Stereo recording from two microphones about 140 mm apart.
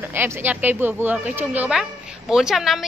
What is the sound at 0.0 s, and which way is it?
Speech, 15° right (ahead or behind).